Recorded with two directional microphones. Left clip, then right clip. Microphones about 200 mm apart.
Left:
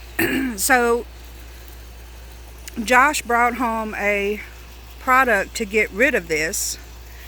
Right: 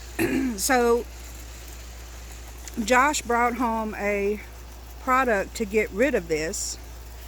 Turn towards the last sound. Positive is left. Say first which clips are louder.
# left 5 dB
turn(degrees=-5)  # may be behind; listen again after turning